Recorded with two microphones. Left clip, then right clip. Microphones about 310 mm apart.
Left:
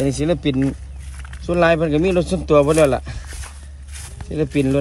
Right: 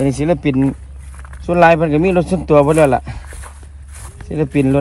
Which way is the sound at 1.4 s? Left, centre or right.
Centre.